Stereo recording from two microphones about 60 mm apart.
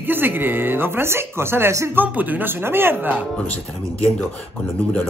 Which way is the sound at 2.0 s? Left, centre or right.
Right.